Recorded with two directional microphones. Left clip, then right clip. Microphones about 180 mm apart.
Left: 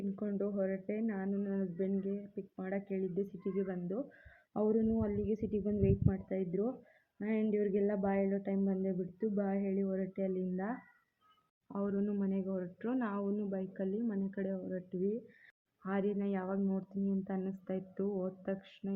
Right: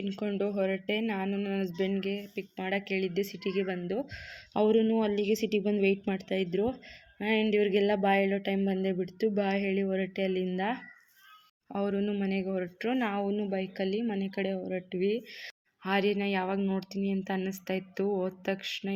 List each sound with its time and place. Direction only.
0.2 s speech: 20° right (ahead or behind)
4.5 s speech: 25° right (ahead or behind)
7.2 s speech: 20° right (ahead or behind)
13.5 s speech: 35° right (ahead or behind)
15.8 s speech: 15° right (ahead or behind)